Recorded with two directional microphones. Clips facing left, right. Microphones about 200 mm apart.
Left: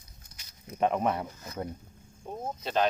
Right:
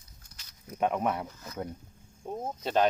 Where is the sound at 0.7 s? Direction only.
Centre (ahead or behind).